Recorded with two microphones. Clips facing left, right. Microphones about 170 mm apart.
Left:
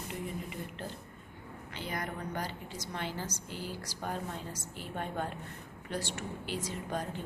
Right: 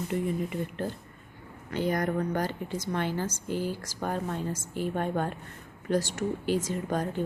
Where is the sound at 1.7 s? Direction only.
45° right (ahead or behind).